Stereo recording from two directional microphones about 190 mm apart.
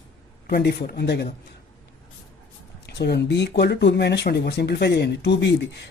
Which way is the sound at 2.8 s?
60° left (ahead or behind).